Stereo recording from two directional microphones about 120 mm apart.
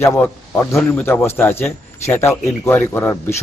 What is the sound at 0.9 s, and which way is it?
A man's voice, 15° left (ahead or behind).